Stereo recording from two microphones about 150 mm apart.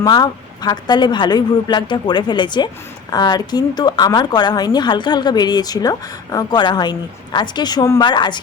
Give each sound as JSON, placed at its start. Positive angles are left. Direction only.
{"t": 0.0, "sound": "speech", "side_deg": 25}